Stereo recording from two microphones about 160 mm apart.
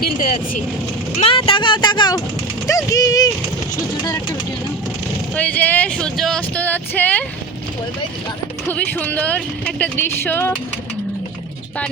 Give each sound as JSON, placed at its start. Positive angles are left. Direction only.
{"t": 0.0, "sound": "speech", "side_deg": 65}
{"t": 1.2, "sound": "speech", "side_deg": 35}
{"t": 5.3, "sound": "speech", "side_deg": 10}
{"t": 8.6, "sound": "speech", "side_deg": 10}